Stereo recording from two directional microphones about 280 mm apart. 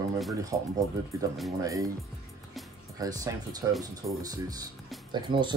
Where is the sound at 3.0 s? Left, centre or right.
Centre.